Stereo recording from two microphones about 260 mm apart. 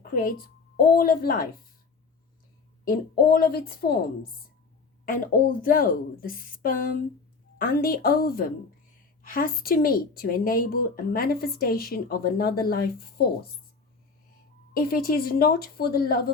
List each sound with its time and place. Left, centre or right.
0.0 s a woman's voice: left
3.2 s a woman's voice: left
14.7 s a woman's voice: left